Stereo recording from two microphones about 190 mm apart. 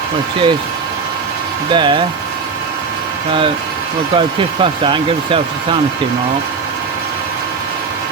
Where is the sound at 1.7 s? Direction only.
25° right (ahead or behind).